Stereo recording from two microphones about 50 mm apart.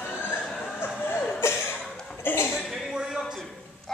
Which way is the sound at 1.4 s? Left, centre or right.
Left.